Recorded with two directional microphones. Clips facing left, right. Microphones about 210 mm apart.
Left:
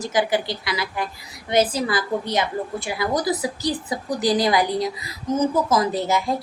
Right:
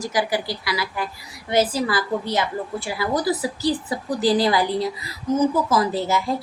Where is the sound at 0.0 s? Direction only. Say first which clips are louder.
Left 2 dB; 20° left (ahead or behind).